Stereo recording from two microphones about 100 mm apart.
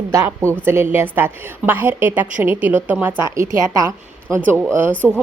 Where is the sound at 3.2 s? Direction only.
30° right (ahead or behind).